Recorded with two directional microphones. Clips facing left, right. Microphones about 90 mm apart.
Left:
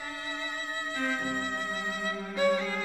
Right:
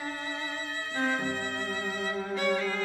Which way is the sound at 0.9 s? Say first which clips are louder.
Right 3 dB; 40° right (ahead or behind).